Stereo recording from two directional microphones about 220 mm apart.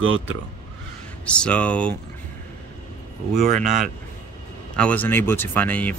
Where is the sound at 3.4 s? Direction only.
35° right (ahead or behind).